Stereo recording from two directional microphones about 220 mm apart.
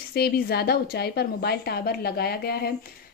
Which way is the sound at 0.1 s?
45° left (ahead or behind).